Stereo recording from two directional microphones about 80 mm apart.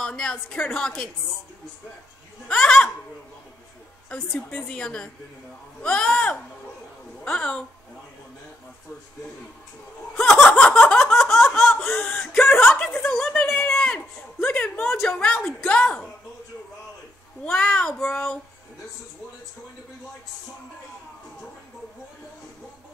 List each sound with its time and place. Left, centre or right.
0.0 s a woman's voice: centre
2.4 s a woman's voice: centre
4.1 s a woman's voice: centre
10.5 s a sound: centre
11.5 s speech: centre
13.5 s a sound: left
13.7 s a sound: centre
15.0 s a woman's voice: centre
17.5 s a woman's voice: centre